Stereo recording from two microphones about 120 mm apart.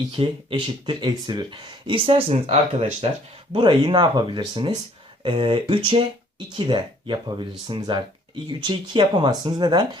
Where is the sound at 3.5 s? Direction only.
40° right (ahead or behind).